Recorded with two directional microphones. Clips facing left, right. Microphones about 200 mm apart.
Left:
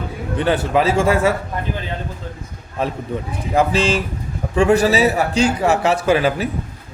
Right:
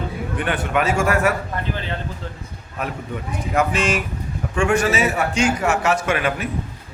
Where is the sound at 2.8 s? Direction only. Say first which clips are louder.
Left 5 dB; 30° left (ahead or behind).